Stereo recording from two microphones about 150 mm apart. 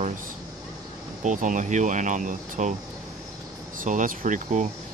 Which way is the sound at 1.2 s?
60° right (ahead or behind).